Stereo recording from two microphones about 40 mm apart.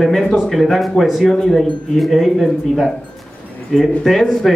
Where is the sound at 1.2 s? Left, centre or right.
Centre.